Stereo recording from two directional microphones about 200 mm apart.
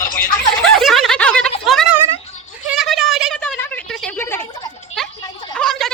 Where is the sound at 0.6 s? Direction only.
Centre (ahead or behind).